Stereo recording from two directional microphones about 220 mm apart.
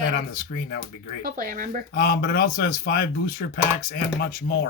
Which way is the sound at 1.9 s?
45° left (ahead or behind).